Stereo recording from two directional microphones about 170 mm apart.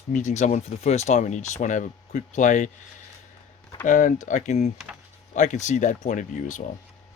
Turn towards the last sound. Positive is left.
turn(degrees=50)  # may be behind; listen again after turning